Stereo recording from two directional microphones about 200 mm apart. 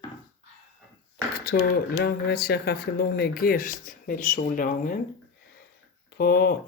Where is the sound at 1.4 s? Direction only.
50° left (ahead or behind).